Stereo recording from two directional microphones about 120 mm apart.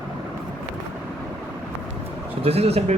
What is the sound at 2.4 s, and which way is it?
Speech, 55° right (ahead or behind).